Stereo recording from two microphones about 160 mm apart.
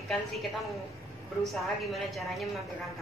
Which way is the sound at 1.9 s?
Centre (ahead or behind).